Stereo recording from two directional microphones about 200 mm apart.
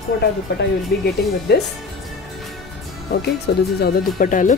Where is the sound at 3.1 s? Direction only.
50° left (ahead or behind).